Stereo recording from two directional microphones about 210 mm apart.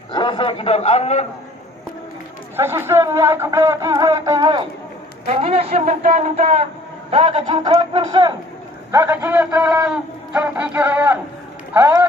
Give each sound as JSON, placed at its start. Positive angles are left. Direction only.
{"t": 0.1, "sound": "a man's voice", "side_deg": 20}
{"t": 2.5, "sound": "a man's voice", "side_deg": -10}